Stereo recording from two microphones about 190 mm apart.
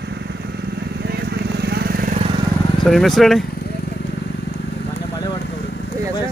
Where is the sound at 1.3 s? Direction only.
60° right (ahead or behind).